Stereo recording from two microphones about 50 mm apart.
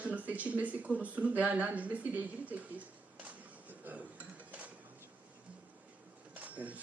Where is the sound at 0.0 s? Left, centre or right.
Right.